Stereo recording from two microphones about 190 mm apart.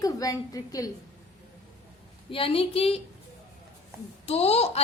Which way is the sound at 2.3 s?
30° left (ahead or behind).